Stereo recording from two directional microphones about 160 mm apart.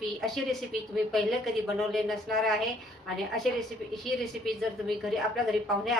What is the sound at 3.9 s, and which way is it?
Speech, centre (ahead or behind).